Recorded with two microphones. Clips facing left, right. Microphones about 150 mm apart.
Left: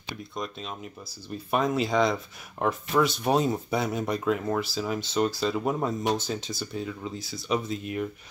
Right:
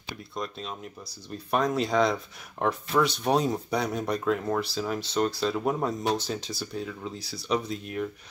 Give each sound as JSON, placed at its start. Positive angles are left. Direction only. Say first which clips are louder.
{"t": 0.3, "sound": "speech", "louder": "right 1 dB", "side_deg": 0}